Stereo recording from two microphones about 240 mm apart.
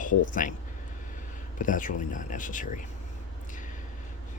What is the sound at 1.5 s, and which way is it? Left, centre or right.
Speech, left.